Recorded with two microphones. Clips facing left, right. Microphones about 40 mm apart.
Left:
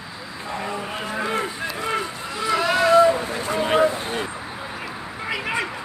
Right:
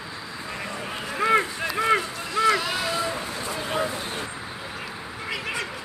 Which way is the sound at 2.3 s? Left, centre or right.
Centre.